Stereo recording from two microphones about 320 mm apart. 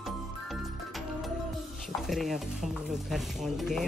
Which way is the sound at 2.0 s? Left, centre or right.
Centre.